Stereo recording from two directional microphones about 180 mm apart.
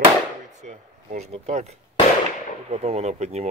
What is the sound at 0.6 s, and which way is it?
Speech, 40° right (ahead or behind).